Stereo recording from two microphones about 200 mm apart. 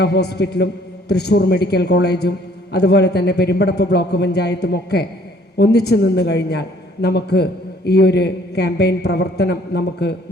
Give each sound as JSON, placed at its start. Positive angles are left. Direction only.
{"t": 0.0, "sound": "a woman's voice", "side_deg": 55}